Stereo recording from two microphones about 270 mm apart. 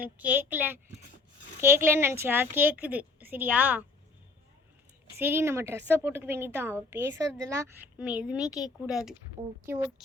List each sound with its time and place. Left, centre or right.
0.0 s a woman's voice: centre
5.2 s a woman's voice: centre